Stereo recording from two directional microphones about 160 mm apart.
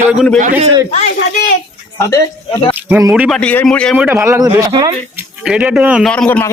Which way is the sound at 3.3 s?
5° left (ahead or behind).